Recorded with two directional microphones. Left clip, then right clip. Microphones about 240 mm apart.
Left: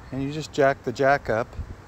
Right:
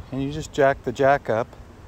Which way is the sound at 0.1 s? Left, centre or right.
Centre.